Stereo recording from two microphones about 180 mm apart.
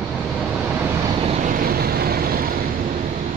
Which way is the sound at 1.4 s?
55° right (ahead or behind).